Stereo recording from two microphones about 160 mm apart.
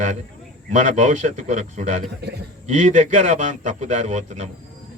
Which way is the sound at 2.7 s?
50° right (ahead or behind).